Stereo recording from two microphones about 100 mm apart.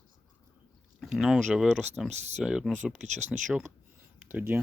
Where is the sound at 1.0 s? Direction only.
5° right (ahead or behind).